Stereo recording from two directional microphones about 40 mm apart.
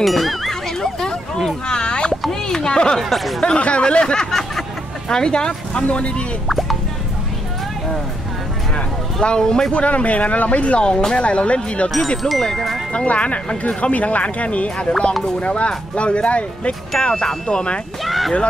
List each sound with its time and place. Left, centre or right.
0.0 s speech: centre
0.7 s a sound: centre
3.0 s speech: centre
3.4 s speech: left
4.3 s a sound: centre
5.1 s speech: centre
8.7 s speech: left
9.7 s speech: left
12.2 s speech: centre
12.9 s speech: left
18.0 s speech: centre